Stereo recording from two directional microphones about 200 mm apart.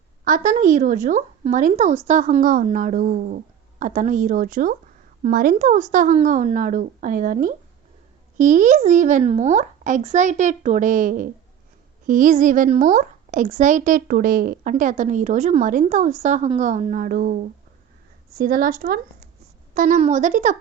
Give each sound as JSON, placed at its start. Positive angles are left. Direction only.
{"t": 0.3, "sound": "a woman's voice", "side_deg": -40}